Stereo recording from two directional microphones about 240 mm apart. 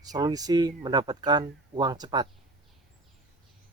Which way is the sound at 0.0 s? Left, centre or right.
Centre.